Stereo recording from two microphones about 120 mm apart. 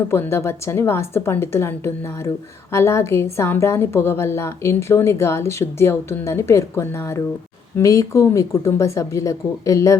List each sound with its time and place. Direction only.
0.1 s a woman's voice: 20° left (ahead or behind)